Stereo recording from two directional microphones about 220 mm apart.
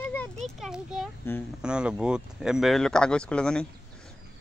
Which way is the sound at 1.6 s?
5° right (ahead or behind).